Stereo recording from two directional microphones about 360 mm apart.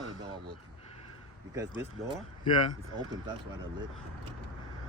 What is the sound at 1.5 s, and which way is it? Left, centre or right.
Speech, centre.